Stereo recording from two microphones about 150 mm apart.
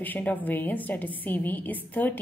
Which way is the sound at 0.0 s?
10° left (ahead or behind).